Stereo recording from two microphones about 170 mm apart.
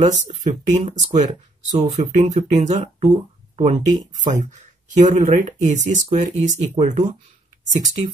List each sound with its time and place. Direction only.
0.0 s speech: 45° right (ahead or behind)